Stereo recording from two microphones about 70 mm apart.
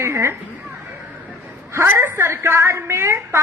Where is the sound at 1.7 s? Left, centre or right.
Right.